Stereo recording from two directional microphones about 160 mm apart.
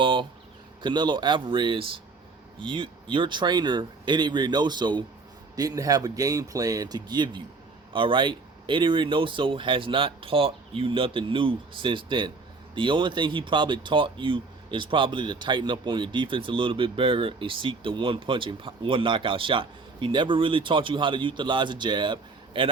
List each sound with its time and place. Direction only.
0.0 s insect: 30° right (ahead or behind)
0.8 s speech: 30° right (ahead or behind)